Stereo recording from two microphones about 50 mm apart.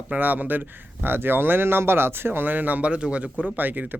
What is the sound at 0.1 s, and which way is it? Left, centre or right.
Speech, right.